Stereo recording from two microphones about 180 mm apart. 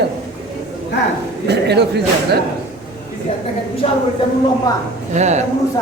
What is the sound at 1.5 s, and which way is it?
Speech, 70° right (ahead or behind).